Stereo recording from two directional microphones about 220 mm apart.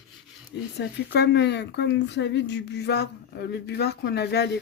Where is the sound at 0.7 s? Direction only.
50° left (ahead or behind).